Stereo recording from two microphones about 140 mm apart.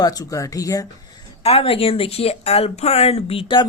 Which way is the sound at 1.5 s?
45° left (ahead or behind).